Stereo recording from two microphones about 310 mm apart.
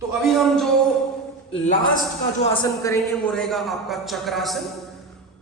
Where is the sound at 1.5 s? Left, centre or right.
Left; by 4.6 s centre.